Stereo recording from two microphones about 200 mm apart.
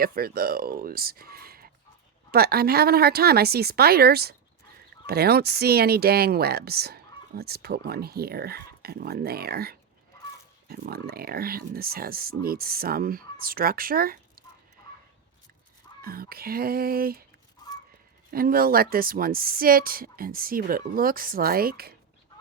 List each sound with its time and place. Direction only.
0.0 s speech: 50° right (ahead or behind)
16.0 s speech: 50° right (ahead or behind)
18.3 s speech: 45° right (ahead or behind)